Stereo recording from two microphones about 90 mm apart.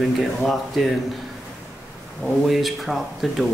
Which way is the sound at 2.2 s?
Centre (ahead or behind).